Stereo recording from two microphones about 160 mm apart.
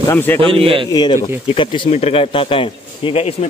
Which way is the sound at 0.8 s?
25° left (ahead or behind).